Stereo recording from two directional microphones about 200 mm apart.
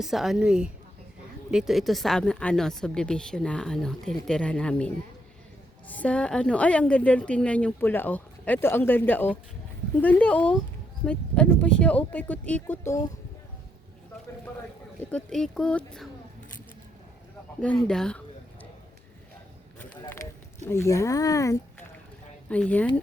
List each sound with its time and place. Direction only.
0.0 s speech: centre (ahead or behind)
5.9 s a woman's voice: 5° left (ahead or behind)
15.1 s speech: centre (ahead or behind)
17.6 s speech: 5° left (ahead or behind)
19.8 s a sound: 10° left (ahead or behind)
20.7 s a woman's voice: 15° left (ahead or behind)